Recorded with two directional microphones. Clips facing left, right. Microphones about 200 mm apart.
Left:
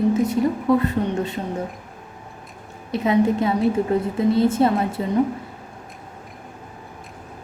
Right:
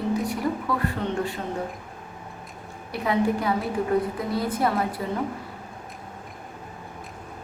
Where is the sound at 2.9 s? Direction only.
20° left (ahead or behind).